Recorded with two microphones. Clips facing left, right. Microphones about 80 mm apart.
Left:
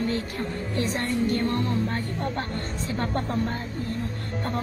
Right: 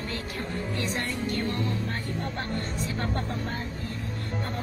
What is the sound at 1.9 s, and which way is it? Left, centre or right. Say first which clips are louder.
A woman's voice: left 4 dB; left.